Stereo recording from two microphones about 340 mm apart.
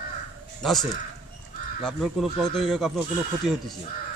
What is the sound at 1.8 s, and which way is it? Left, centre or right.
A man's voice, centre.